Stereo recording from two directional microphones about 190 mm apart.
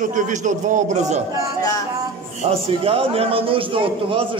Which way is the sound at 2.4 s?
30° right (ahead or behind).